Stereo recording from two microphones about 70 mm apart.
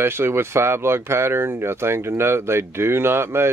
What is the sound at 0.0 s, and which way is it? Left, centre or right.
Speech, right.